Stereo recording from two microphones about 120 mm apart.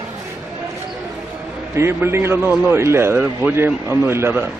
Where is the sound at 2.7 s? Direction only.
20° right (ahead or behind).